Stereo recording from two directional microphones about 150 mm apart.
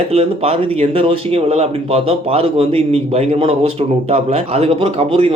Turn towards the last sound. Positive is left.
turn(degrees=-40)  # may be behind; listen again after turning